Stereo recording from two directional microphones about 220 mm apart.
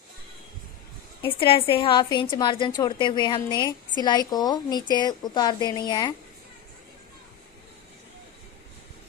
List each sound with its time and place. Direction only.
1.2 s a woman's voice: 25° left (ahead or behind)